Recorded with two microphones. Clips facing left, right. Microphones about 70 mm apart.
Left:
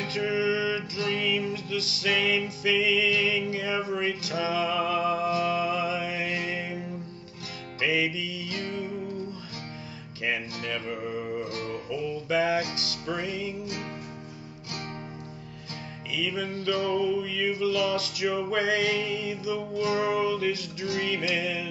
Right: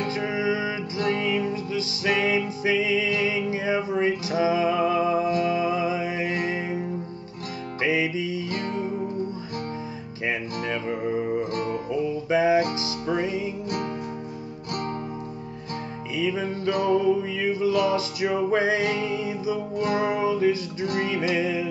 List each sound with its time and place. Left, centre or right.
0.0 s music: right
7.8 s music: right
10.2 s music: right
11.5 s music: right
16.2 s music: right
20.8 s music: right
21.1 s music: right